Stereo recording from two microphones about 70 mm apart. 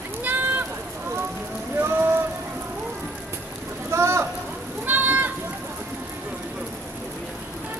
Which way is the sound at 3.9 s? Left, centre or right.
Right.